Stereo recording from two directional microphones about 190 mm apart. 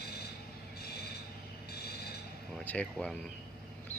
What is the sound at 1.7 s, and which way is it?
Train, 60° left (ahead or behind).